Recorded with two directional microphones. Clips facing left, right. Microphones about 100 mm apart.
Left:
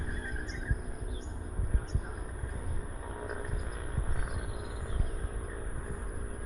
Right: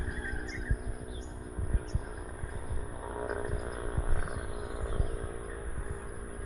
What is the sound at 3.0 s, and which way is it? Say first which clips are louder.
Wild animals: right 5 dB; 20° right (ahead or behind).